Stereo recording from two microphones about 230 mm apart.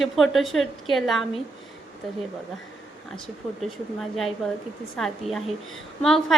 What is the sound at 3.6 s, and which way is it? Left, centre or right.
A woman's voice, centre.